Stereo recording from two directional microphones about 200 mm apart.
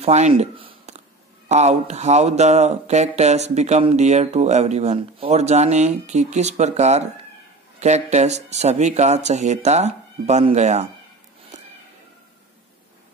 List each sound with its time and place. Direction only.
0.0 s speech: 30° right (ahead or behind)